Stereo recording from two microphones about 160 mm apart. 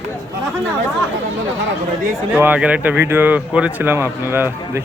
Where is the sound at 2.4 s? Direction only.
10° right (ahead or behind).